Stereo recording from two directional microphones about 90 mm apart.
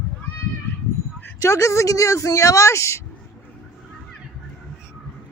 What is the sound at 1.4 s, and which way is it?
Speech, 35° left (ahead or behind).